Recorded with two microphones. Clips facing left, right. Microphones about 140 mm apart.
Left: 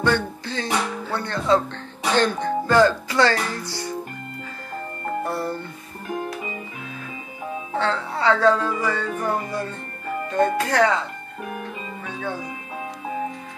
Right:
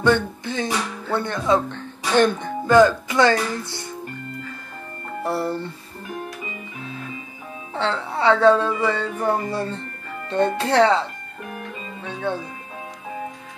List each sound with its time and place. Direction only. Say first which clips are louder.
0.0 s music: right 3 dB; 20° right (ahead or behind)
1.1 s speech: right 1 dB; 20° right (ahead or behind)
5.2 s speech: right 7 dB; 25° right (ahead or behind)
7.8 s speech: right 2 dB; 20° right (ahead or behind)
12.0 s music: right 5 dB; 25° right (ahead or behind)